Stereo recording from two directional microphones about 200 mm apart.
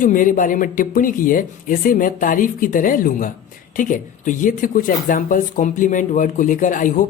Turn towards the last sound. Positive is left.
turn(degrees=40)  # may be behind; listen again after turning